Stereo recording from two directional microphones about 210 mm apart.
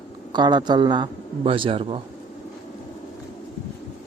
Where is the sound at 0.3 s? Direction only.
20° right (ahead or behind).